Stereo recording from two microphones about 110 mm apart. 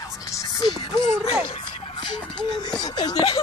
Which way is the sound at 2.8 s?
40° left (ahead or behind).